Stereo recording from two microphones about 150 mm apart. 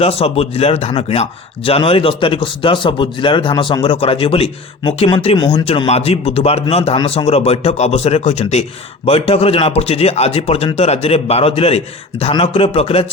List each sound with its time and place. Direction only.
0.0 s a man's voice: 40° left (ahead or behind)